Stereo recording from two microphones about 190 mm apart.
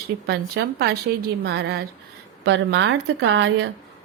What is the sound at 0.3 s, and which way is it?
A woman's voice, 60° right (ahead or behind).